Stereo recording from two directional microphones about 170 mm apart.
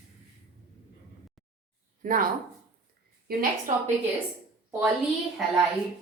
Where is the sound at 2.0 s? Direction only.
50° right (ahead or behind).